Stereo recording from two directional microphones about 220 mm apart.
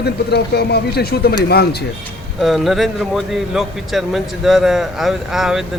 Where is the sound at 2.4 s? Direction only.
Centre (ahead or behind).